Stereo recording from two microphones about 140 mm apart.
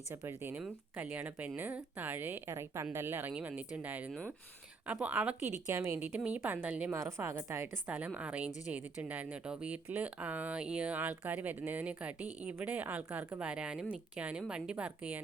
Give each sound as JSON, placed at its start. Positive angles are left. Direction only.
{"t": 0.1, "sound": "speech", "side_deg": -20}
{"t": 5.6, "sound": "speech", "side_deg": -20}